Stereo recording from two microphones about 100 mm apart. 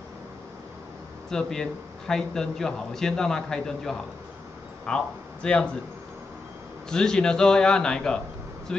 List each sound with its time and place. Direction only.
1.3 s a man's voice: 5° left (ahead or behind)
6.9 s a man's voice: 5° left (ahead or behind)